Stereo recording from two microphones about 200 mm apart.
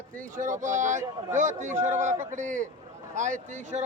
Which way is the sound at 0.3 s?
40° right (ahead or behind).